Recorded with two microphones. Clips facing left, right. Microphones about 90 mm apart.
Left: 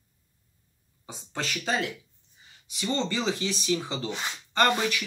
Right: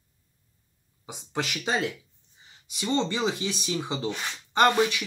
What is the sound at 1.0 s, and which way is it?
Speech, 15° right (ahead or behind).